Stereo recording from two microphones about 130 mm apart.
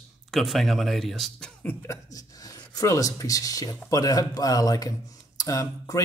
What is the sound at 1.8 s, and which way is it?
Speech, 25° left (ahead or behind).